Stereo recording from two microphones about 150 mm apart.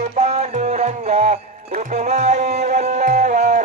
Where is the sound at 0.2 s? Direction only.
45° right (ahead or behind).